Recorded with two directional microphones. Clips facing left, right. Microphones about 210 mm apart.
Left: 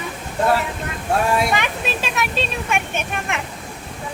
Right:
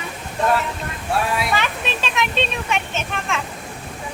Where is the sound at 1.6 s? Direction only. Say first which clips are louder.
Left 1 dB; 10° left (ahead or behind).